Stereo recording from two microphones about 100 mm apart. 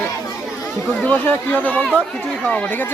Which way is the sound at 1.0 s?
15° left (ahead or behind).